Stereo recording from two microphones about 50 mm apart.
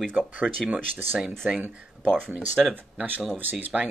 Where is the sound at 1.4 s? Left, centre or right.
Centre.